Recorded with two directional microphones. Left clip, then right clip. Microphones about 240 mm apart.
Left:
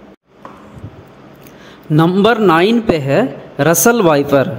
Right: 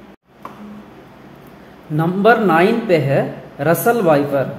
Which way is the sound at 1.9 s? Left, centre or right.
Left.